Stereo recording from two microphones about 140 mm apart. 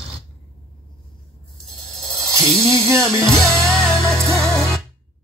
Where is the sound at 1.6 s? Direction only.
5° left (ahead or behind).